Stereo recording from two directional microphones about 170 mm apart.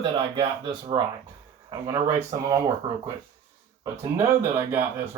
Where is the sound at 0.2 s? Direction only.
30° right (ahead or behind).